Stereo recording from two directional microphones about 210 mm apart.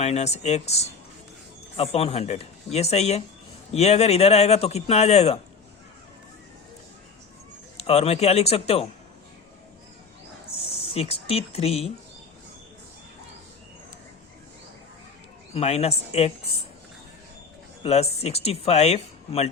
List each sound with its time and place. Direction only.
0.0 s a man's voice: 30° left (ahead or behind)
7.8 s a man's voice: 30° left (ahead or behind)
10.5 s speech: 30° left (ahead or behind)
15.5 s a man's voice: 30° left (ahead or behind)
17.8 s a man's voice: 30° left (ahead or behind)